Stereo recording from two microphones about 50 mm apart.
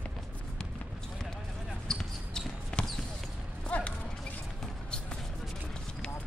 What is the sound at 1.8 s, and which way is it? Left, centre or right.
Basketball bounce, centre.